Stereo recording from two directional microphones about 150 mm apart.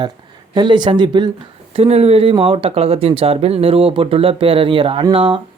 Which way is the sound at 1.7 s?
40° right (ahead or behind).